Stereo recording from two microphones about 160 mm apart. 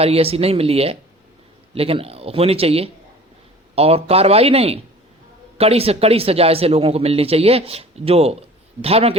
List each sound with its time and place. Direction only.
0.0 s speech: 40° right (ahead or behind)